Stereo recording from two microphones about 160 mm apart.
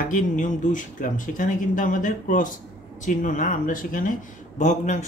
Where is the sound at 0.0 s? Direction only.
55° left (ahead or behind).